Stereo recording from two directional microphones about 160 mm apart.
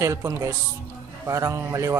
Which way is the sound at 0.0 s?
20° right (ahead or behind).